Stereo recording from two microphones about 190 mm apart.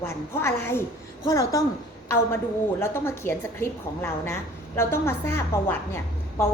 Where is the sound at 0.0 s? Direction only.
15° left (ahead or behind).